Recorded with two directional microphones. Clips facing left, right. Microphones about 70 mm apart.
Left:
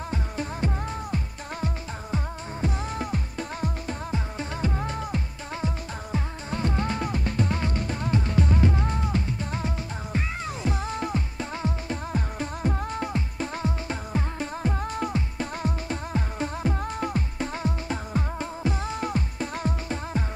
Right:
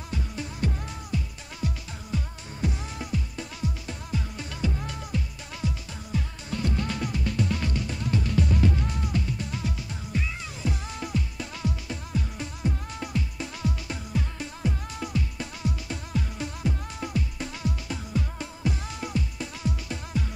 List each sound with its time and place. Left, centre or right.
0.1 s music: left
4.1 s music: left